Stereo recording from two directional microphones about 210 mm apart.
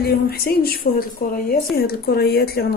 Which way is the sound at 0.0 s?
45° left (ahead or behind).